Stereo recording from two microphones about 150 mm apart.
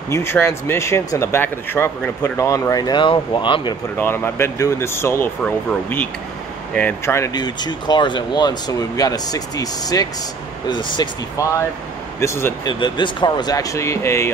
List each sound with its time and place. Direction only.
0.1 s speech: 15° left (ahead or behind); by 3.7 s 30° left (ahead or behind)
4.0 s speech: 15° left (ahead or behind)
7.3 s speech: 30° left (ahead or behind)
12.6 s speech: 30° left (ahead or behind)